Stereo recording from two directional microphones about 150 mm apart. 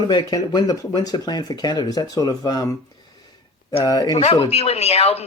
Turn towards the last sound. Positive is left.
turn(degrees=40)  # may be behind; listen again after turning